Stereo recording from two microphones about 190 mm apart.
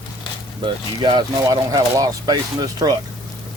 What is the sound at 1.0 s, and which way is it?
Speech, 25° right (ahead or behind).